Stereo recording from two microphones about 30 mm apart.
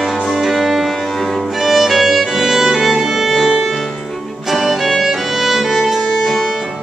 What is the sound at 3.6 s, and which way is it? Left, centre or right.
Music, centre.